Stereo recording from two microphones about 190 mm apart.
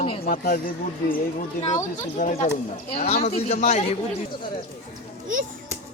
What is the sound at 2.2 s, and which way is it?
Speech, 40° left (ahead or behind).